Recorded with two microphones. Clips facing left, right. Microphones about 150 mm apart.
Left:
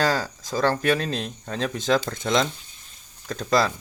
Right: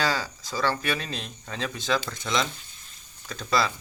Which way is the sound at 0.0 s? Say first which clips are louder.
Left 4 dB; 45° left (ahead or behind).